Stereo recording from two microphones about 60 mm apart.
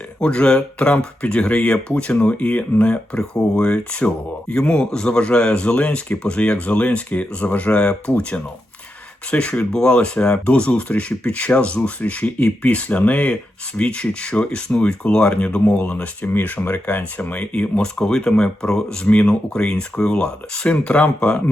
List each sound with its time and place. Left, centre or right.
0.2 s speech: centre